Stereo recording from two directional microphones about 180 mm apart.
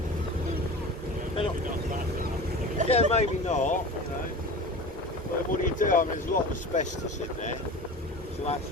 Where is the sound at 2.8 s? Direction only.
35° left (ahead or behind).